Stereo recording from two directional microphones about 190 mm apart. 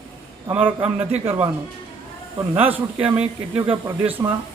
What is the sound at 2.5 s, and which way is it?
A man's voice, 10° right (ahead or behind).